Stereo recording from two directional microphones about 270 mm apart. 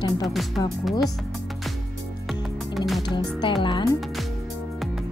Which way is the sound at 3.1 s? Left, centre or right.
Centre.